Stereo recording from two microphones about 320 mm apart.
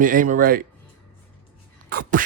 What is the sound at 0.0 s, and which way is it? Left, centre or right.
Speech, right.